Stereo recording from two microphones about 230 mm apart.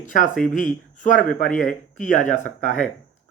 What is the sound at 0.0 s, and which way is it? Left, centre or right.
Speech, left.